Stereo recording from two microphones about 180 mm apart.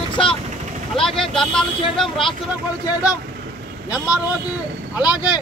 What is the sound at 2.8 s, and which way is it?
Speech, 20° left (ahead or behind).